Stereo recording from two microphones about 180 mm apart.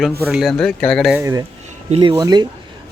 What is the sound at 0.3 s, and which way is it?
Speech, centre (ahead or behind).